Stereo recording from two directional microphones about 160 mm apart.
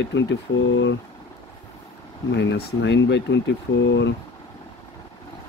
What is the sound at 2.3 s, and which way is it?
Speech, 90° left.